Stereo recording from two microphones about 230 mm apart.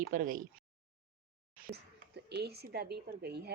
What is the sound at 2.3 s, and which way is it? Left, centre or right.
A woman's voice, right.